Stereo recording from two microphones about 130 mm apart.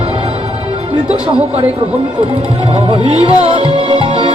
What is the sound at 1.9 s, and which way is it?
Speech, 50° right (ahead or behind).